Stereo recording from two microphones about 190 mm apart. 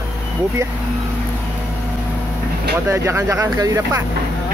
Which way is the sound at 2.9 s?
15° right (ahead or behind).